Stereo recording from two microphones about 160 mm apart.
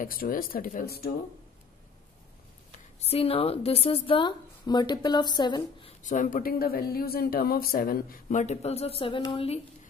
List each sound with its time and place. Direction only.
0.0 s speech: 60° left (ahead or behind)
3.0 s a woman's voice: 40° left (ahead or behind)
6.0 s a woman's voice: 55° left (ahead or behind); by 9.6 s 35° left (ahead or behind)